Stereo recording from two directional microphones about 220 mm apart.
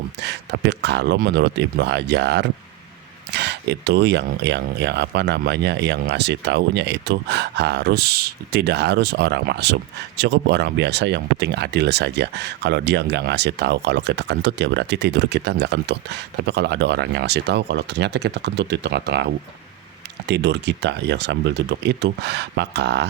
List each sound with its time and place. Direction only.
0.2 s speech: 50° right (ahead or behind)